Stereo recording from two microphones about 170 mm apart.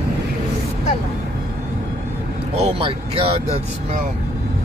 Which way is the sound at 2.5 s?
35° right (ahead or behind).